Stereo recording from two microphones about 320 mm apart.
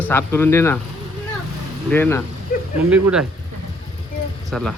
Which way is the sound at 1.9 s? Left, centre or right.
Centre.